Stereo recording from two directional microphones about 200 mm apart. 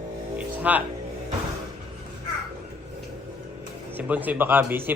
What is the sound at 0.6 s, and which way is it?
Speech, 10° right (ahead or behind).